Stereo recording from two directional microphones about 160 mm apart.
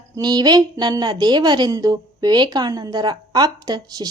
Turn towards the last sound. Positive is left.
turn(degrees=-25)  # may be behind; listen again after turning